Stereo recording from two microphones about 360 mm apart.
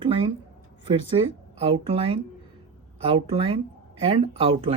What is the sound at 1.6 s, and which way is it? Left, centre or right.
Speech, centre.